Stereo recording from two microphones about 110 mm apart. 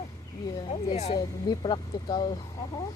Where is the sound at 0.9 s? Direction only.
70° left (ahead or behind).